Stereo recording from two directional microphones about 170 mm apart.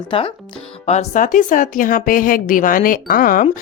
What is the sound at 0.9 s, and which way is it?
A woman's voice, 45° left (ahead or behind).